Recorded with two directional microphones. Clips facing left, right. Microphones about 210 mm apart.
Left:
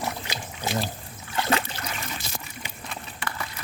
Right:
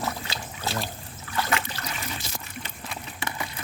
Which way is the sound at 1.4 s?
30° left (ahead or behind).